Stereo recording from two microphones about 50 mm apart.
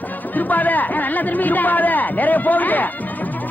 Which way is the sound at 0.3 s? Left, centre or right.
Left.